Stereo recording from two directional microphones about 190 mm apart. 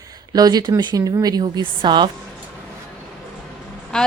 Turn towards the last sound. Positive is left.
turn(degrees=5)  # may be behind; listen again after turning